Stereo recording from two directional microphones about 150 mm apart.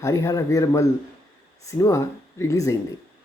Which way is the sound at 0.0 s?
20° left (ahead or behind).